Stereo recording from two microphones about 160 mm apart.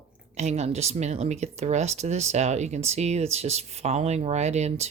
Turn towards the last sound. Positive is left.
turn(degrees=-45)  # may be behind; listen again after turning